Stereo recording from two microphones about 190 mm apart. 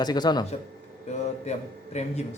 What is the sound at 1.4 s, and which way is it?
Speech, 35° left (ahead or behind).